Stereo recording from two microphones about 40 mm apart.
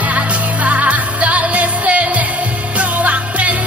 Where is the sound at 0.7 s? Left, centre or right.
Right.